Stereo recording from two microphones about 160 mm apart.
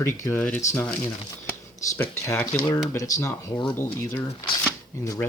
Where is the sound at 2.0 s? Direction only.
15° left (ahead or behind).